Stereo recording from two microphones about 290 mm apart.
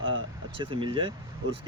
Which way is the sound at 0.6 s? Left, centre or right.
Centre.